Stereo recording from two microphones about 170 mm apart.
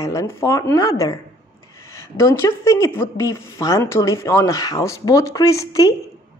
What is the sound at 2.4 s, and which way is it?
A woman's voice, 15° left (ahead or behind).